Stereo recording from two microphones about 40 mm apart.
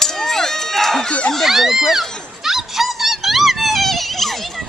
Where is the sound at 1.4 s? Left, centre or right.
Centre.